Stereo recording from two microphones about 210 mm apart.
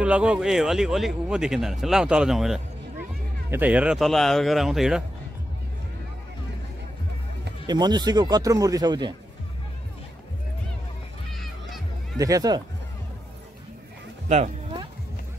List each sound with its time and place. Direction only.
0.0 s speech: 5° right (ahead or behind)
7.6 s a man's voice: 20° right (ahead or behind)
11.3 s music: centre (ahead or behind)
12.2 s speech: 15° right (ahead or behind)